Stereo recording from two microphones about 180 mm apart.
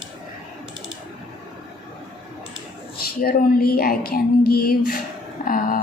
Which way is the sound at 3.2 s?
55° left (ahead or behind).